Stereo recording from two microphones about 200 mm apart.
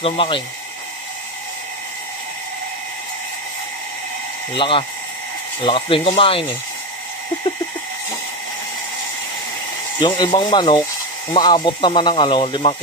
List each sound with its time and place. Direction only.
0.0 s speech: 25° left (ahead or behind)
4.6 s speech: 25° left (ahead or behind)
9.9 s speech: 20° left (ahead or behind)